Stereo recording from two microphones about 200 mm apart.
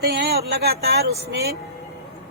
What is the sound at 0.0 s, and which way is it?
A woman's voice, 55° right (ahead or behind).